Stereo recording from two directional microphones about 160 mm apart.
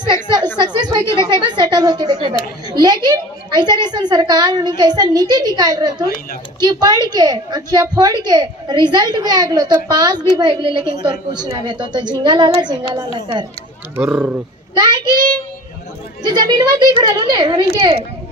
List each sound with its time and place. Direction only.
0.0 s chatter: 30° right (ahead or behind)
0.6 s a woman's voice: 25° right (ahead or behind)
13.9 s speech: 10° right (ahead or behind)
14.7 s a woman's voice: 25° right (ahead or behind)
16.3 s a woman's voice: 25° right (ahead or behind)